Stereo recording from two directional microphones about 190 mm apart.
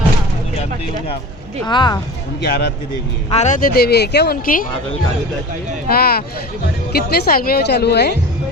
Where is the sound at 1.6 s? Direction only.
25° left (ahead or behind).